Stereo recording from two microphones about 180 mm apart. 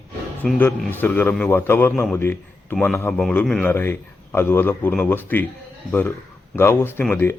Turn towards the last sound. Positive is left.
turn(degrees=10)  # may be behind; listen again after turning